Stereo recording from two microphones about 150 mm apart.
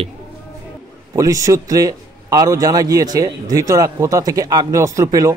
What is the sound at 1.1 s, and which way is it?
Speech, 20° right (ahead or behind).